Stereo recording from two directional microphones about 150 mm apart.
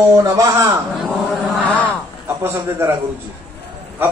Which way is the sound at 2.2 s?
15° right (ahead or behind).